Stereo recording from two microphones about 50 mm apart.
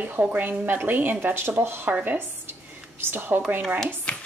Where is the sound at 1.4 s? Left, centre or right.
Right.